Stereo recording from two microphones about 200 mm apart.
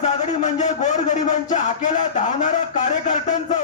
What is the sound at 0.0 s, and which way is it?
A man's voice, 35° left (ahead or behind).